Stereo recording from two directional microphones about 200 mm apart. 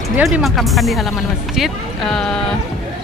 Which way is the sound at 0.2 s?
Centre (ahead or behind).